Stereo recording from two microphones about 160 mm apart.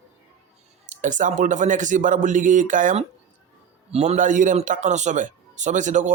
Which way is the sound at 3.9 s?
45° right (ahead or behind).